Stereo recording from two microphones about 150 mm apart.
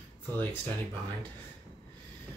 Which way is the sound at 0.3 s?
15° left (ahead or behind).